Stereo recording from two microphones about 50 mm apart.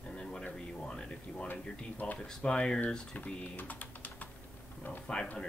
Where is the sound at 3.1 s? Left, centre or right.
Left.